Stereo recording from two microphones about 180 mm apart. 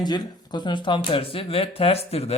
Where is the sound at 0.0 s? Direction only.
25° left (ahead or behind).